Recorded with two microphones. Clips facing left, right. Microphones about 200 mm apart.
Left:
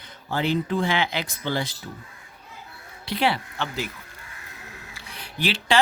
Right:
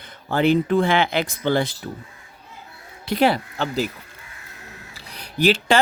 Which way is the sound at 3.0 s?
45° right (ahead or behind).